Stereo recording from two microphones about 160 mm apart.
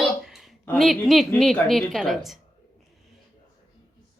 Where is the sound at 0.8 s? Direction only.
Centre (ahead or behind).